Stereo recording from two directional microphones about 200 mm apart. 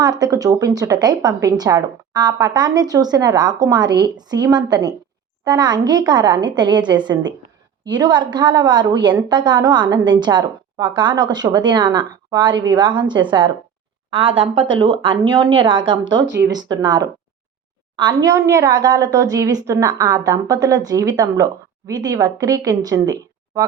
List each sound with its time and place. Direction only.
0.0 s a woman's voice: 20° right (ahead or behind)
16.2 s speech: 60° right (ahead or behind)
16.5 s a woman's voice: 20° right (ahead or behind)